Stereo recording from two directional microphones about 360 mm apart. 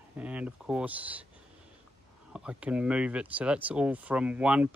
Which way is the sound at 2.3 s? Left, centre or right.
Centre.